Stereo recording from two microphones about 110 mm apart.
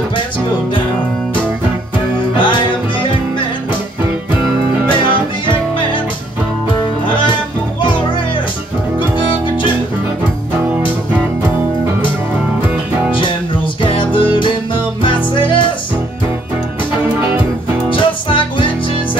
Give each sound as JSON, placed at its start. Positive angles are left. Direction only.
{"t": 2.3, "sound": "music", "side_deg": 45}
{"t": 13.8, "sound": "music", "side_deg": 50}
{"t": 17.8, "sound": "music", "side_deg": 50}